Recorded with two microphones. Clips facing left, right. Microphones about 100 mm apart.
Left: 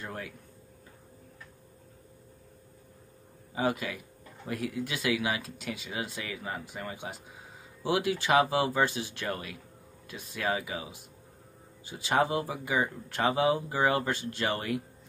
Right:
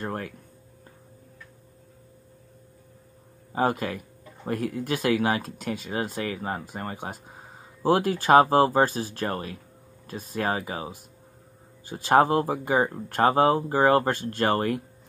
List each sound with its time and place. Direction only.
0.0 s speech: 50° right (ahead or behind)
3.5 s speech: 50° right (ahead or behind)